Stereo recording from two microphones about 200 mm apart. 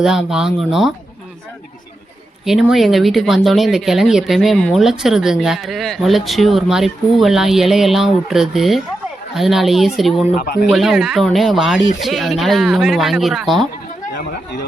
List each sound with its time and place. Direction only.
0.0 s speech: centre (ahead or behind)
2.4 s speech: centre (ahead or behind)
10.3 s speech: 45° left (ahead or behind)
10.7 s speech: centre (ahead or behind)